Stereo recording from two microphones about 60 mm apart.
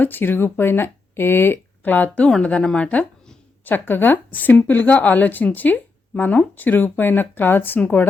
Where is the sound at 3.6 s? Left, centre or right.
Left.